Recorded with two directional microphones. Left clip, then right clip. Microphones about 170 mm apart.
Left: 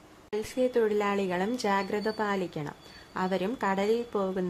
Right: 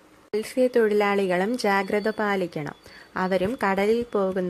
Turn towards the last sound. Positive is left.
turn(degrees=-25)  # may be behind; listen again after turning